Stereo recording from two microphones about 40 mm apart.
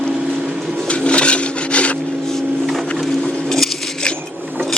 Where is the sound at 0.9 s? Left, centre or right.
Left.